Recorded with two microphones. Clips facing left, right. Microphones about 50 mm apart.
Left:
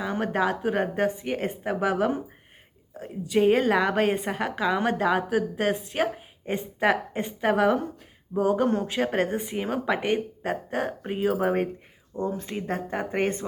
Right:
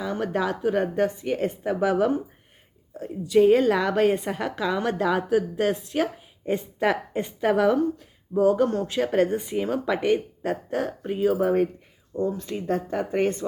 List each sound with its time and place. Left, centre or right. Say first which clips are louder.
0.0 s a woman's voice: even; left
12.1 s a woman's voice: right 2 dB; centre